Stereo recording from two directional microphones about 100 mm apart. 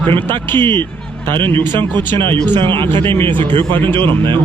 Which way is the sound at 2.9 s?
20° left (ahead or behind).